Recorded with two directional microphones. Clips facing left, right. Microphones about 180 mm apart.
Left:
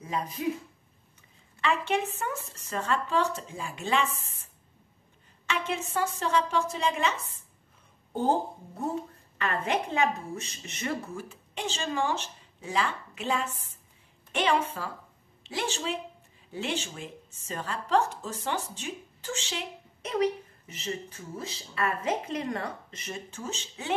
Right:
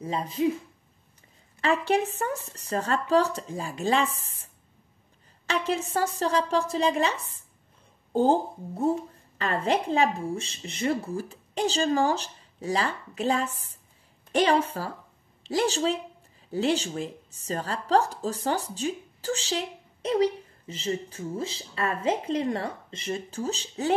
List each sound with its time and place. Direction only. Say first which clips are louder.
0.0 s speech: right 6 dB; 30° right (ahead or behind)
1.6 s speech: right 4 dB; 40° right (ahead or behind)
5.5 s speech: right 4 dB; 35° right (ahead or behind)